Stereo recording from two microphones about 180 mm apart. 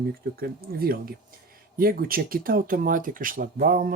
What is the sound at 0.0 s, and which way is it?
Speech, 55° right (ahead or behind).